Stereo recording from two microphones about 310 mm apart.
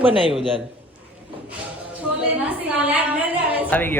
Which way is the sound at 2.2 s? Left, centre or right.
Centre.